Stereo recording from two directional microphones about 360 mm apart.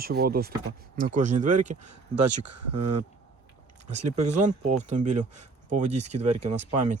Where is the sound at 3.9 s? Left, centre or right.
Centre.